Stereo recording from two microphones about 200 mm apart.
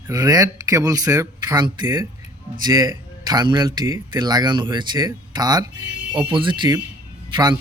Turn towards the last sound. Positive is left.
turn(degrees=-20)  # may be behind; listen again after turning